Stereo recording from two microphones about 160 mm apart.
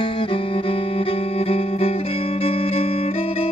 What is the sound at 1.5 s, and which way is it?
Music, 35° left (ahead or behind).